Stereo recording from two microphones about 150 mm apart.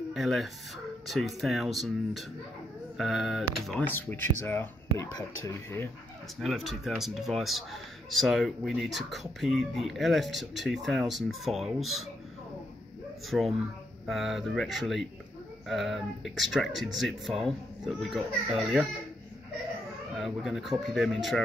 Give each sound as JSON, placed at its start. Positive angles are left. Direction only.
{"t": 0.1, "sound": "speech", "side_deg": 0}
{"t": 3.8, "sound": "speech", "side_deg": 15}
{"t": 6.4, "sound": "speech", "side_deg": 0}
{"t": 13.3, "sound": "speech", "side_deg": 0}
{"t": 20.2, "sound": "speech", "side_deg": 0}